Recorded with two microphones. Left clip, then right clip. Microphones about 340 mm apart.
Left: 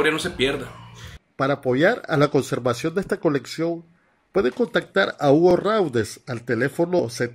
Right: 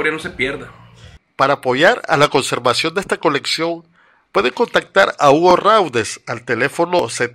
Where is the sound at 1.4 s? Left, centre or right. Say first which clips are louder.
Right 7 dB; right.